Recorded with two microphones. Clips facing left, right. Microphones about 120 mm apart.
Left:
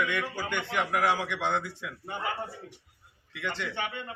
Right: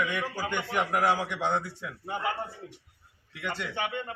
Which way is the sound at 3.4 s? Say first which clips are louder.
Even; 10° right (ahead or behind).